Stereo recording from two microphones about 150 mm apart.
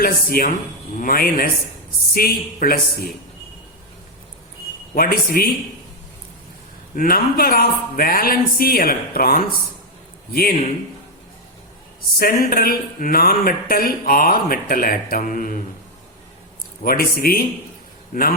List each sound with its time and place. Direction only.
0.0 s speech: 75° left (ahead or behind)
4.9 s speech: 75° left (ahead or behind)
6.9 s speech: 70° left (ahead or behind)
12.2 s speech: 75° left (ahead or behind)
16.8 s speech: 80° left